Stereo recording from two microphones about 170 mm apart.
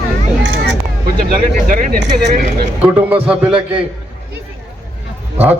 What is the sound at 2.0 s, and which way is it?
Speech, 80° right.